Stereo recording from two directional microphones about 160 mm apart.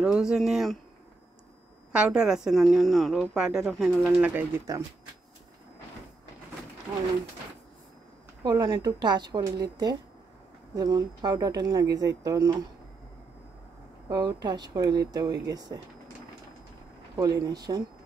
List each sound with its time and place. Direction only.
0.0 s a woman's voice: 5° right (ahead or behind)
1.9 s a woman's voice: 5° right (ahead or behind)
4.3 s speech: 15° right (ahead or behind)
8.5 s speech: 25° right (ahead or behind)
14.0 s speech: 25° right (ahead or behind)
17.2 s speech: 20° right (ahead or behind)